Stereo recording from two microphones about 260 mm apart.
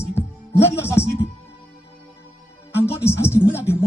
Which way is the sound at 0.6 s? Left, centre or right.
Centre.